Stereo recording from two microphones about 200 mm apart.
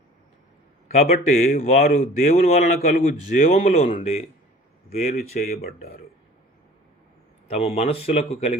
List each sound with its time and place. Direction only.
1.0 s a man's voice: 45° left (ahead or behind)
1.7 s a man's voice: 30° left (ahead or behind)
7.4 s a man's voice: 30° left (ahead or behind)